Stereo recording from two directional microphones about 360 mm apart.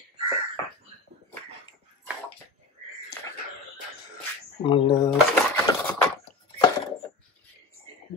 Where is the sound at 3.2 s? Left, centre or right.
Centre.